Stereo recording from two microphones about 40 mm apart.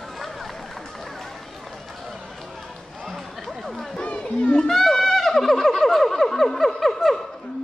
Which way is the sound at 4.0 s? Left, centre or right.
Left.